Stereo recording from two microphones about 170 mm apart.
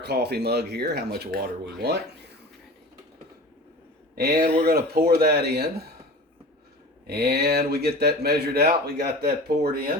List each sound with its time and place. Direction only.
0.0 s speech: 75° right (ahead or behind)
4.1 s speech: 65° right (ahead or behind)
7.1 s speech: 70° right (ahead or behind)